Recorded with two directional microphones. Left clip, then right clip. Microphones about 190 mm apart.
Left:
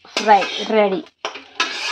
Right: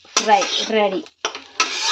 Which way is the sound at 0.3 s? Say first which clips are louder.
Left 3 dB; 15° left (ahead or behind).